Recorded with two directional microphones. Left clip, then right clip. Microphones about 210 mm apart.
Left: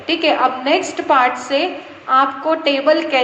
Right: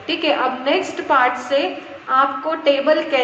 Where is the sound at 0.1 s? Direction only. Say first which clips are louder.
Left 3 dB; 50° left (ahead or behind).